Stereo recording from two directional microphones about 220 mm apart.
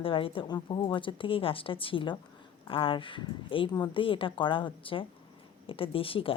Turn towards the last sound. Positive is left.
turn(degrees=25)  # may be behind; listen again after turning